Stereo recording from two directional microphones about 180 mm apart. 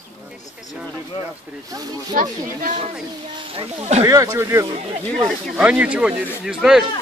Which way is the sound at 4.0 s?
20° right (ahead or behind).